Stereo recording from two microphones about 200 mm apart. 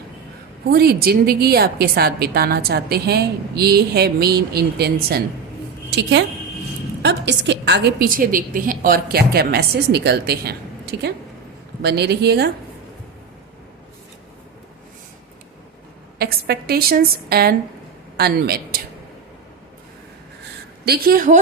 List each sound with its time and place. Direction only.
0.7 s a woman's voice: 50° right (ahead or behind)
11.8 s speech: 55° right (ahead or behind)
16.1 s a woman's voice: 50° right (ahead or behind)
20.8 s a woman's voice: 50° right (ahead or behind)